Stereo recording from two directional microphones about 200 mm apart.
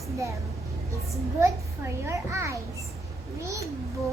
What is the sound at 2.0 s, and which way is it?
Speech, 15° right (ahead or behind).